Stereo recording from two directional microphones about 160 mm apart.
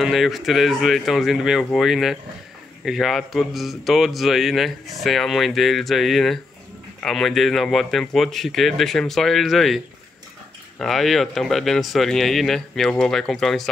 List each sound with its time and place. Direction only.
0.0 s speech: centre (ahead or behind)
10.8 s speech: centre (ahead or behind)